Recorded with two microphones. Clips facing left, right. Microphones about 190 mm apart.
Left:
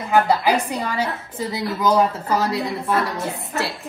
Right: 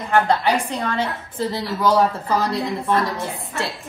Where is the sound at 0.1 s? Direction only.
5° left (ahead or behind).